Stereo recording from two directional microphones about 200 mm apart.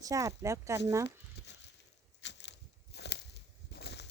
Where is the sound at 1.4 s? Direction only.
60° left (ahead or behind).